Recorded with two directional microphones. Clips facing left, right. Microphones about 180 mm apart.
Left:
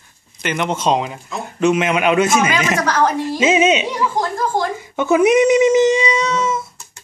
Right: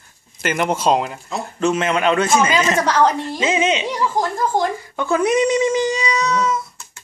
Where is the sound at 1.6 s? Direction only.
10° left (ahead or behind).